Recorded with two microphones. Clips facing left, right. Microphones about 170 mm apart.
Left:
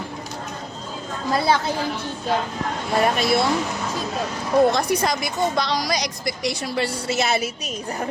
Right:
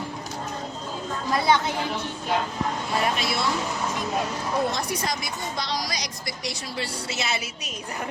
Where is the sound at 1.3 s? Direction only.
35° left (ahead or behind).